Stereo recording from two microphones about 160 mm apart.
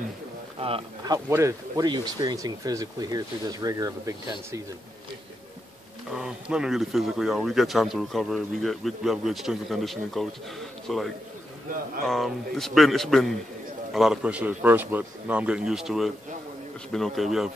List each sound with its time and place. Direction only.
0.6 s speech: 35° right (ahead or behind)
1.0 s speech: 20° right (ahead or behind)
6.0 s speech: 5° right (ahead or behind)
12.1 s a man's voice: centre (ahead or behind)